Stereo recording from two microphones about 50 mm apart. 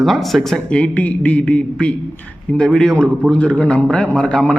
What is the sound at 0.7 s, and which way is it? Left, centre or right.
A man's voice, left.